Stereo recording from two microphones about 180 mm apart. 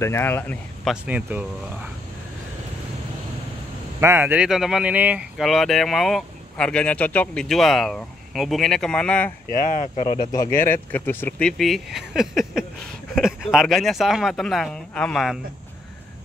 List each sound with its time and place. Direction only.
0.0 s speech: 15° left (ahead or behind)
0.8 s speech: 10° right (ahead or behind)
4.0 s speech: 10° right (ahead or behind); by 9.3 s 5° left (ahead or behind)
9.5 s speech: 50° left (ahead or behind)
10.3 s speech: 15° left (ahead or behind)